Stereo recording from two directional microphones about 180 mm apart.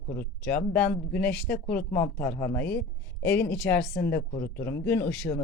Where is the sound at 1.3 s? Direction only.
60° left (ahead or behind).